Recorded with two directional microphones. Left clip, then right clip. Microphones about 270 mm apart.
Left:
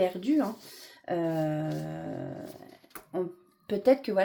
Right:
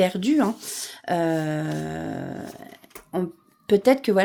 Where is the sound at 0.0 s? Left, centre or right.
Right.